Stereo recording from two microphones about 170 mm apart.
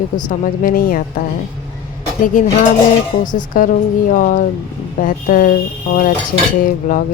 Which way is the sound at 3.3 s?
55° left (ahead or behind).